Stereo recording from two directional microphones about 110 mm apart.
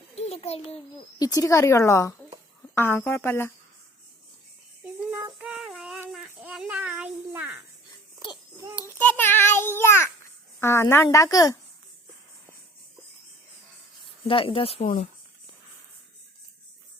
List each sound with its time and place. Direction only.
0.2 s a child's voice: 70° left (ahead or behind)
1.2 s a woman's voice: 30° left (ahead or behind)
5.4 s music: 5° right (ahead or behind)
6.1 s a sound: 5° right (ahead or behind)
8.2 s babbling: 45° left (ahead or behind)
9.0 s a sound: 15° left (ahead or behind)
10.6 s a woman's voice: 25° left (ahead or behind)
14.3 s speech: 55° left (ahead or behind)